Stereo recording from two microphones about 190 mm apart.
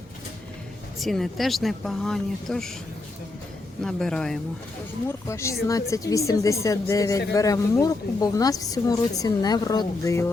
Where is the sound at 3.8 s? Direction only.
5° left (ahead or behind).